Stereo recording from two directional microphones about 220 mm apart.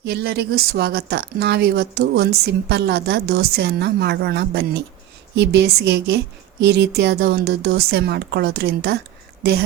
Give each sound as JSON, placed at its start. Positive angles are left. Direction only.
{"t": 0.0, "sound": "speech", "side_deg": -50}